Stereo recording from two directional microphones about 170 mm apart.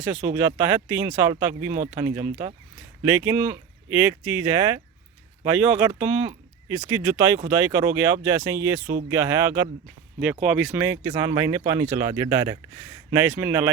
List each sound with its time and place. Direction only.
0.0 s speech: 10° right (ahead or behind)
10.2 s speech: 5° right (ahead or behind)